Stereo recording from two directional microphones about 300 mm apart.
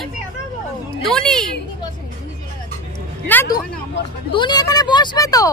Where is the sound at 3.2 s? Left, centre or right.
Centre.